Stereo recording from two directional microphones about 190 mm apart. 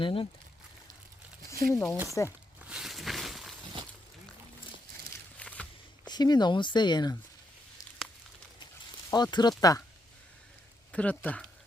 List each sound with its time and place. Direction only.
0.0 s speech: 30° left (ahead or behind)
1.7 s speech: 15° left (ahead or behind)
2.6 s a sound: 5° right (ahead or behind)
5.4 s a sound: 5° left (ahead or behind)
6.1 s speech: 20° left (ahead or behind)
9.0 s speech: 20° left (ahead or behind)
10.9 s speech: 5° left (ahead or behind)